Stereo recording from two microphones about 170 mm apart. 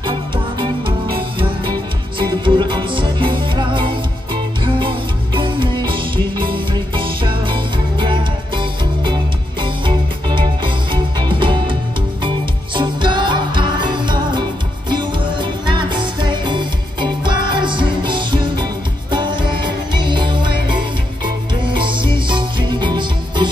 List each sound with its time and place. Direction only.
0.6 s music: 30° right (ahead or behind)
21.6 s music: 30° right (ahead or behind)